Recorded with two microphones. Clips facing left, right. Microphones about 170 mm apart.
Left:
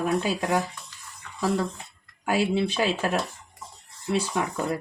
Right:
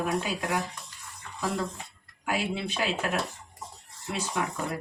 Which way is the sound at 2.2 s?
35° left (ahead or behind).